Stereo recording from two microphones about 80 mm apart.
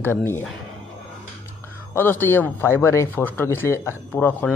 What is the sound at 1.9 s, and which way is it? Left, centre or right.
Speech, left.